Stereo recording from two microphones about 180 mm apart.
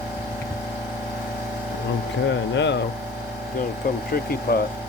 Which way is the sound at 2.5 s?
75° left (ahead or behind).